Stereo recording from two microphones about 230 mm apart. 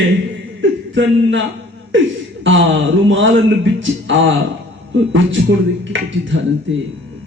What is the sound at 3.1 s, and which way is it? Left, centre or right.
Speech, right.